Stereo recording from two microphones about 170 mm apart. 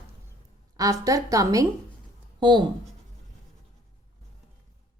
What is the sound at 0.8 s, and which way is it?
A woman's voice, 20° right (ahead or behind).